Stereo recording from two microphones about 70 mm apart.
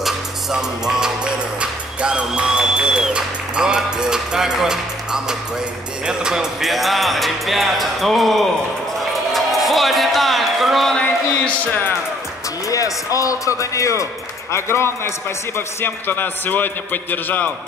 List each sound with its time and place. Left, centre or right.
0.0 s music: centre
6.0 s speech: centre
9.3 s music: centre
11.0 s speech: centre
12.6 s a man's voice: left